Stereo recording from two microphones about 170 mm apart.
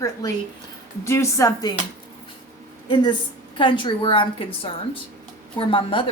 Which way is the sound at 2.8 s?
25° left (ahead or behind).